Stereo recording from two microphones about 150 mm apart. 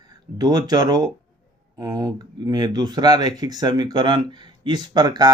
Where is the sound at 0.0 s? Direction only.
25° right (ahead or behind).